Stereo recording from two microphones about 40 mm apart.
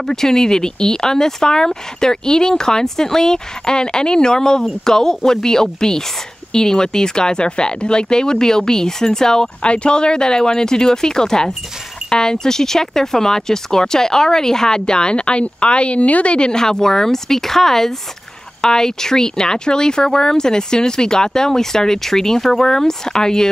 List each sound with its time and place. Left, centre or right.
0.0 s speech: centre
9.6 s speech: left